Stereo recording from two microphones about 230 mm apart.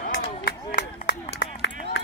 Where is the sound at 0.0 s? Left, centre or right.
Left.